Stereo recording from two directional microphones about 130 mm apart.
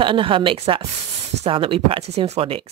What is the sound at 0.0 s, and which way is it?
Speech, 40° right (ahead or behind).